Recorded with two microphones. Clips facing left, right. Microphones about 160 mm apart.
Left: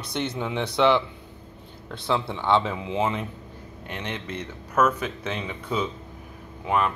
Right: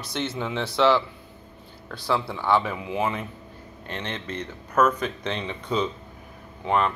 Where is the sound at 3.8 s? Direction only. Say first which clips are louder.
Even; 10° left (ahead or behind).